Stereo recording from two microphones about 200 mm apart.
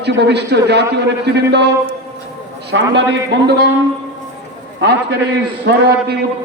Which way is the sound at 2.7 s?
60° right (ahead or behind).